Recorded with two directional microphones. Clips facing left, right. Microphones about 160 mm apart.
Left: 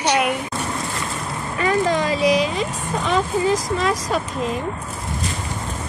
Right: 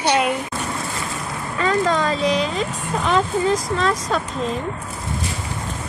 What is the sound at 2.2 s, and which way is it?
Speech, 5° left (ahead or behind).